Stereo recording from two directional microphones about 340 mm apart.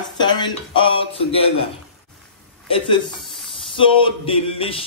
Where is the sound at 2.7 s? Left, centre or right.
Centre.